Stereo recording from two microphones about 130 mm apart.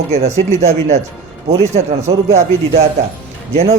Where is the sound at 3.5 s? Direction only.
55° right (ahead or behind).